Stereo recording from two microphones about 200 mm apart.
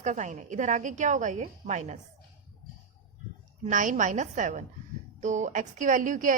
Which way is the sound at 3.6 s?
40° right (ahead or behind).